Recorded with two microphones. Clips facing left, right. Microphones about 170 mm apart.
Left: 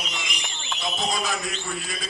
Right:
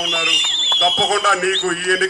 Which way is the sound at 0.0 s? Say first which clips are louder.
Right 10 dB; 70° right (ahead or behind).